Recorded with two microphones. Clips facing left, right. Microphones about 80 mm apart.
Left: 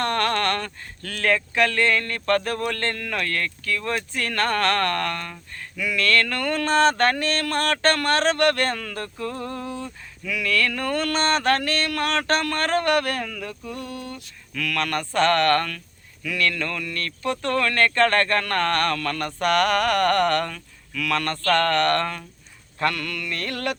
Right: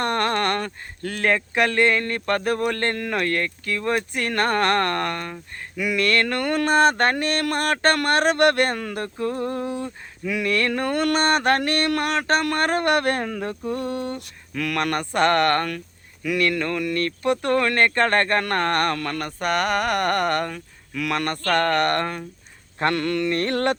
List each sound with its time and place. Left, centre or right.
0.0 s speech: right
14.5 s speech: right
19.4 s speech: centre
22.8 s mantra: right